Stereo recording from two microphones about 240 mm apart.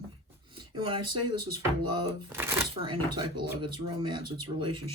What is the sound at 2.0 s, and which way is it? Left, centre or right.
Speech, centre.